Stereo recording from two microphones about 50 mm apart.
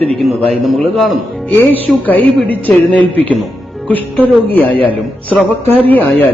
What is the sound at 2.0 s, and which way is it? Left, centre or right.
Speech, left.